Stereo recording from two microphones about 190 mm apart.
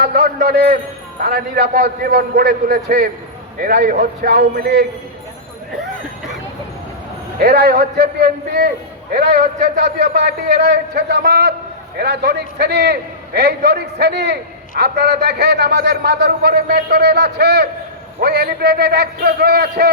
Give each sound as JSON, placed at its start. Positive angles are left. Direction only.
{"t": 0.0, "sound": "a man's voice", "side_deg": -55}
{"t": 7.3, "sound": "a man's voice", "side_deg": -55}